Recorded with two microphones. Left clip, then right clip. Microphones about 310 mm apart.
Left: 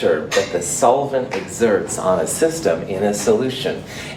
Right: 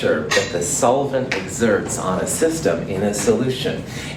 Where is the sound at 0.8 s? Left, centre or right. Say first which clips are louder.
Left 2 dB; left.